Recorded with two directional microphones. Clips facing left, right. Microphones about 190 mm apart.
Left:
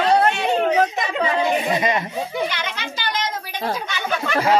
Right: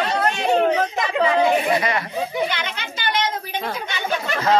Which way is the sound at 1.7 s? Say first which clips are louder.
Left 1 dB; 20° left (ahead or behind).